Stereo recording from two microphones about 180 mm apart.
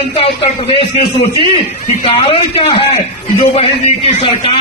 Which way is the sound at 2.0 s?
30° left (ahead or behind).